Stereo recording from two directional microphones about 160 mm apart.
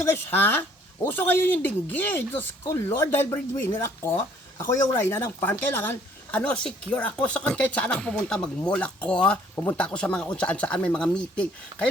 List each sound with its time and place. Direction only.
0.0 s a woman's voice: 10° left (ahead or behind)